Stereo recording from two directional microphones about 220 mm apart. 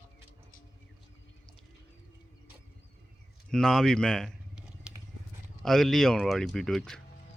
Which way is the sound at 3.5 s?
Centre (ahead or behind).